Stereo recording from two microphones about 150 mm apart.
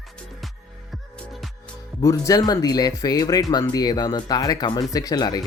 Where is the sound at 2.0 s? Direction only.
20° left (ahead or behind).